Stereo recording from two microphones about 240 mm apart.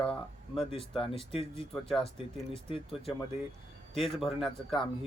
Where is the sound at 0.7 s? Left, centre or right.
Left.